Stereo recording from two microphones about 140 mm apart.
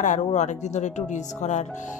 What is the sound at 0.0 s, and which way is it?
Speech, 60° left (ahead or behind).